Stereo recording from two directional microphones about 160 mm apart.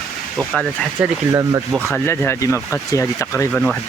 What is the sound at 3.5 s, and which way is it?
Speech, 5° left (ahead or behind).